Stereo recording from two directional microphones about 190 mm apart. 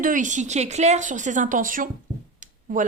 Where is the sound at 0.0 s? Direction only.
45° right (ahead or behind).